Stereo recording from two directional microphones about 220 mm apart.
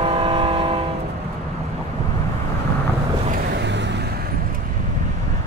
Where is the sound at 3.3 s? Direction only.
50° right (ahead or behind).